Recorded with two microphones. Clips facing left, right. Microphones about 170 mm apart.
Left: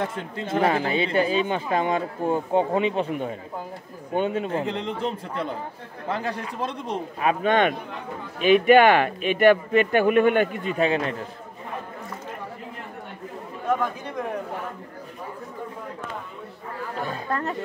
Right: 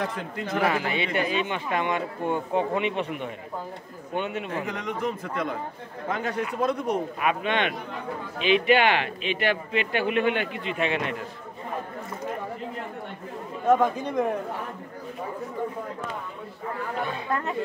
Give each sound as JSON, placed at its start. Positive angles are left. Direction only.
{"t": 0.0, "sound": "speech", "side_deg": 25}
{"t": 17.0, "sound": "speech", "side_deg": 40}